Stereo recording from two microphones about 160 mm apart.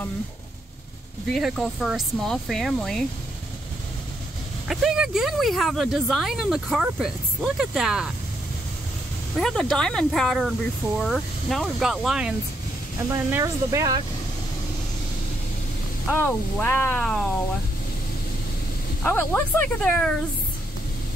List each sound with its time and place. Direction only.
1.3 s speech: centre (ahead or behind)
4.6 s speech: 5° right (ahead or behind)
9.4 s speech: centre (ahead or behind)
13.1 s speech: 20° right (ahead or behind)
16.1 s speech: 10° left (ahead or behind)
19.0 s speech: 10° left (ahead or behind)